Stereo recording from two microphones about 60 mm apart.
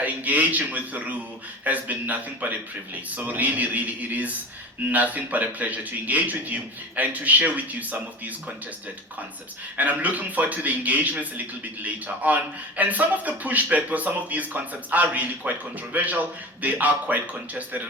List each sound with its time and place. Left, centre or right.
0.0 s a man's voice: right
9.7 s a man's voice: right